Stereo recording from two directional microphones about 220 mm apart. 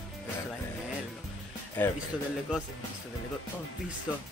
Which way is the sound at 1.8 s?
10° left (ahead or behind).